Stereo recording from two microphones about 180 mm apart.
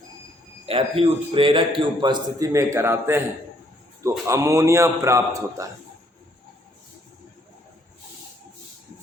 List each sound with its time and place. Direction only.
0.6 s a man's voice: 30° right (ahead or behind); by 3.2 s 15° right (ahead or behind)
4.3 s a man's voice: 15° right (ahead or behind)